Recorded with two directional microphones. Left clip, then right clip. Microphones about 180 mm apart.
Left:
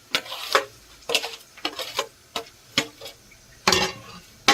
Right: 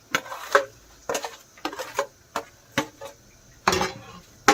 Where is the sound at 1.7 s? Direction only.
5° left (ahead or behind).